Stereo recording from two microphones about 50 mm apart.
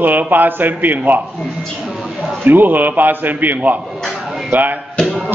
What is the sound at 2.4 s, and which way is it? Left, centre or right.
A man's voice, right.